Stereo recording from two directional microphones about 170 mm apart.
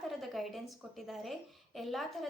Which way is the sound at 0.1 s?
Centre (ahead or behind).